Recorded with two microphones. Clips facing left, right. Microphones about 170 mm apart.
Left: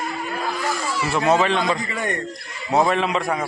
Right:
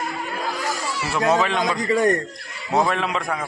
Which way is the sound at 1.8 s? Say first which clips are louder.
Right 8 dB; 40° right (ahead or behind).